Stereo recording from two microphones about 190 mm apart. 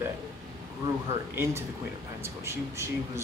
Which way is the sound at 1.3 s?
15° right (ahead or behind).